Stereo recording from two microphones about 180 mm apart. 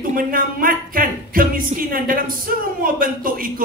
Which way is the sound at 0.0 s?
50° right (ahead or behind).